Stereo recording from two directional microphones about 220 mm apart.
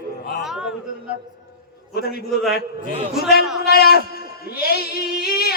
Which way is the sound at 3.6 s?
45° left (ahead or behind).